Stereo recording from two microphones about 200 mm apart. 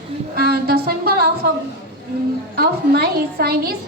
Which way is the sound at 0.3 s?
50° right (ahead or behind).